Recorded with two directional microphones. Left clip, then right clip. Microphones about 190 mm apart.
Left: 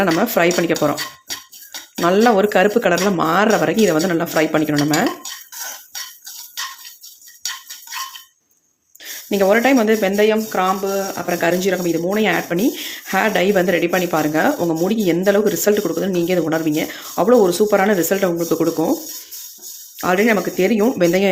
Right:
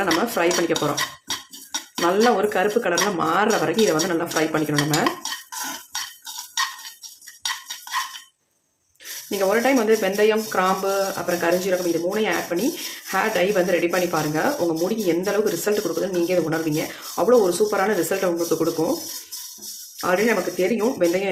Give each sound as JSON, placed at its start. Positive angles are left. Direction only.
{"t": 0.0, "sound": "speech", "side_deg": 40}
{"t": 2.2, "sound": "speech", "side_deg": 40}
{"t": 9.4, "sound": "speech", "side_deg": 40}
{"t": 11.3, "sound": "speech", "side_deg": 40}
{"t": 20.0, "sound": "speech", "side_deg": 45}